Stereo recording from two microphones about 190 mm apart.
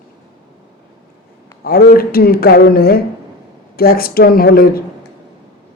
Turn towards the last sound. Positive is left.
turn(degrees=50)  # may be behind; listen again after turning